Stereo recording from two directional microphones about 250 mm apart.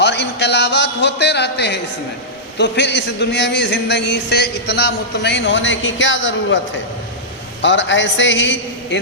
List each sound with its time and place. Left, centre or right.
0.0 s a sound: left
2.6 s a man's voice: left
7.6 s a man's voice: left